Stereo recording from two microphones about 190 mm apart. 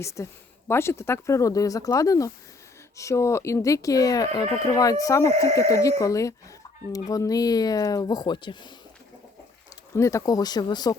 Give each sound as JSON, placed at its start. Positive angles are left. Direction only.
{"t": 0.0, "sound": "speech", "side_deg": 15}
{"t": 9.9, "sound": "speech", "side_deg": 15}